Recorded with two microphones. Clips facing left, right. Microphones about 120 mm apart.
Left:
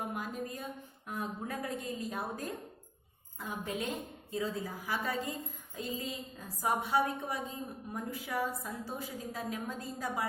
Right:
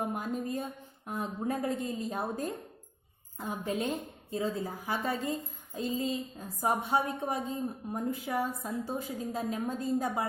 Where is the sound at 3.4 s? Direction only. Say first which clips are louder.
Right 4 dB; 40° right (ahead or behind).